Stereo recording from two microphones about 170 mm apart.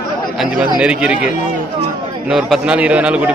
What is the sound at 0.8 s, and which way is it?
A man's voice, 5° right (ahead or behind).